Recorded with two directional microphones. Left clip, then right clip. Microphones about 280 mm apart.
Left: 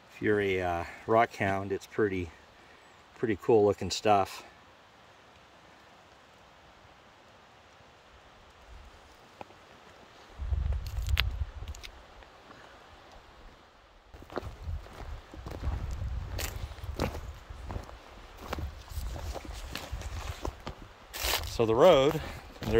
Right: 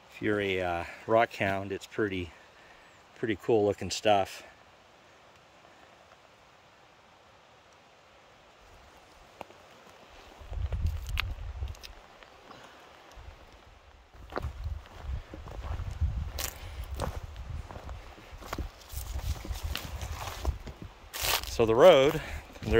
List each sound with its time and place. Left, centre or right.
0.2 s speech: centre
10.8 s a sound: centre
14.3 s boat: centre
16.4 s keys jangling: centre
19.7 s walk: centre
20.2 s a sound: centre